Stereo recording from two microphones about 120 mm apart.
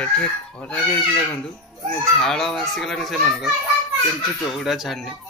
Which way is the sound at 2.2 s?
5° left (ahead or behind).